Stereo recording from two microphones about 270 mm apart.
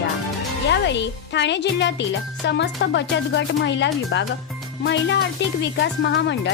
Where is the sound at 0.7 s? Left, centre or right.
Left.